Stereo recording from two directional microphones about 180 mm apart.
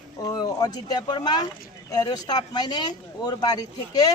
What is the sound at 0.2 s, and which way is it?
Speech, 20° left (ahead or behind).